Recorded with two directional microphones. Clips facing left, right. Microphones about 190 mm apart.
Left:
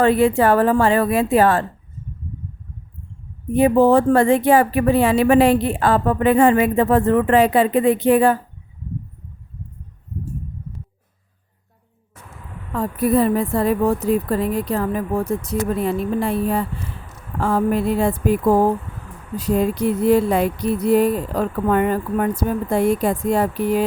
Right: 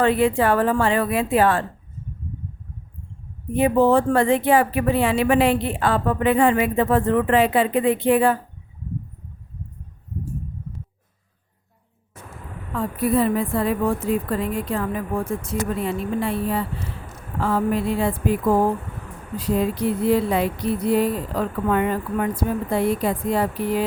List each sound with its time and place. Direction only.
0.0 s a woman's voice: 40° left (ahead or behind)
3.5 s speech: 40° left (ahead or behind)
12.7 s a woman's voice: 40° left (ahead or behind)